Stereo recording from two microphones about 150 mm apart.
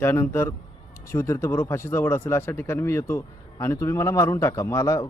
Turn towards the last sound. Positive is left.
turn(degrees=20)  # may be behind; listen again after turning